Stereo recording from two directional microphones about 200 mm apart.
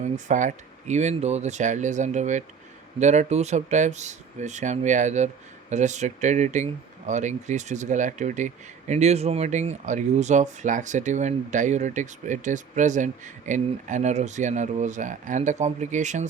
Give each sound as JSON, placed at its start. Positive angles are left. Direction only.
{"t": 0.0, "sound": "speech", "side_deg": -35}